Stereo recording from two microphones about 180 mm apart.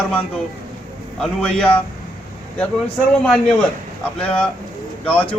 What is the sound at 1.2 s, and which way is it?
Speech, 5° left (ahead or behind).